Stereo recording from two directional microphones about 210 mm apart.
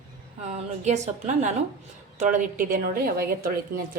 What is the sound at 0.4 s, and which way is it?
A woman's voice, 30° right (ahead or behind).